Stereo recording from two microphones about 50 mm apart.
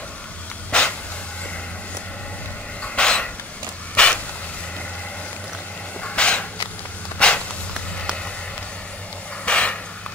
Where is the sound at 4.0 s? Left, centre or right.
Centre.